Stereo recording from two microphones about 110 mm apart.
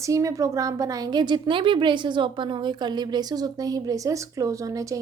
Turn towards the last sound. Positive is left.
turn(degrees=-30)  # may be behind; listen again after turning